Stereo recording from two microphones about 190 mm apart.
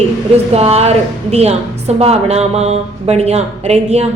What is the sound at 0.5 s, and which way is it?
A woman's voice, 35° right (ahead or behind).